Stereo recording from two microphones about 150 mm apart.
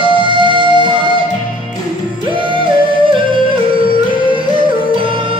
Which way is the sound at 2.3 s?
35° right (ahead or behind).